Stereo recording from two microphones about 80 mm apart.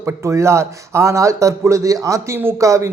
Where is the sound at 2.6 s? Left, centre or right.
Right.